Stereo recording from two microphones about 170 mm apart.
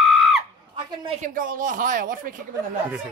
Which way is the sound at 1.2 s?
55° right (ahead or behind).